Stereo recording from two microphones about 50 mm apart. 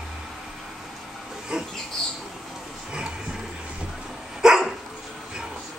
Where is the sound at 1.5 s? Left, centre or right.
Centre.